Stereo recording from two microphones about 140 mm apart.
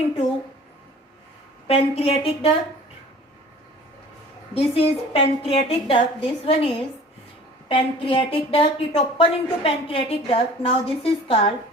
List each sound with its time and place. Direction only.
1.6 s a woman's voice: 45° left (ahead or behind)
4.5 s a woman's voice: 45° left (ahead or behind)
7.7 s a woman's voice: 40° left (ahead or behind)